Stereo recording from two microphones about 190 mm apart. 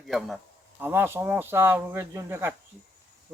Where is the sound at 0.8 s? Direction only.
10° right (ahead or behind).